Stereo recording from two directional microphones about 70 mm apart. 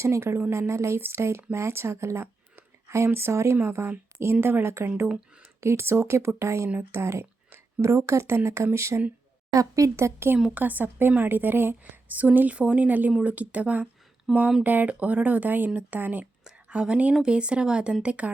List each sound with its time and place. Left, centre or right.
0.0 s speech: right
9.5 s speech: right
10.5 s speech: right
14.3 s speech: centre
14.6 s speech: right
16.4 s a sound: centre
17.2 s speech: centre